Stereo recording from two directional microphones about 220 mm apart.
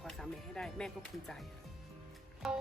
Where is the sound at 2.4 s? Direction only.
Centre (ahead or behind).